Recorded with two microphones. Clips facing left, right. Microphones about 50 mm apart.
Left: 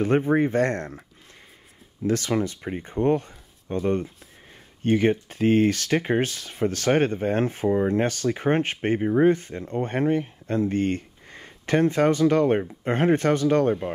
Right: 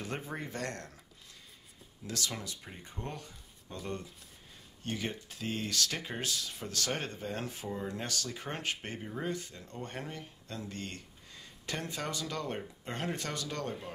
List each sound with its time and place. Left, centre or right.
0.0 s speech: left
2.0 s speech: left